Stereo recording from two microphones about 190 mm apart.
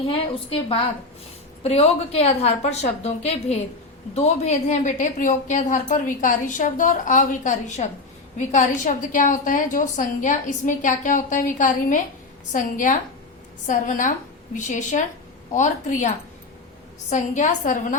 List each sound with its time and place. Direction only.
0.1 s a woman's voice: 30° left (ahead or behind)